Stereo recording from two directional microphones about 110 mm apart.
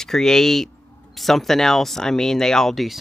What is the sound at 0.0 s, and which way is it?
Speech, 5° left (ahead or behind).